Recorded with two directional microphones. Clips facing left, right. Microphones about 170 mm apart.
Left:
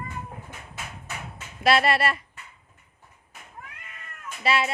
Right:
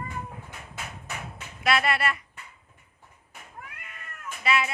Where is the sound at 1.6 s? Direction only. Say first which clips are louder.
Left 4 dB; 30° left (ahead or behind).